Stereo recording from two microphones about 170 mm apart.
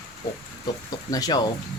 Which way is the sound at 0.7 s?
25° left (ahead or behind).